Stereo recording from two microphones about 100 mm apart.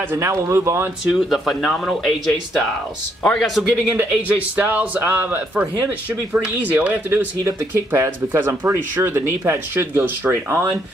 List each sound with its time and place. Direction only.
0.1 s speech: 30° right (ahead or behind)
1.1 s speech: centre (ahead or behind)
3.3 s speech: centre (ahead or behind)
4.1 s speech: 15° right (ahead or behind)